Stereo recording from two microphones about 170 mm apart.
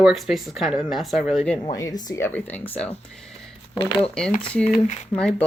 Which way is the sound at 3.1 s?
Centre (ahead or behind).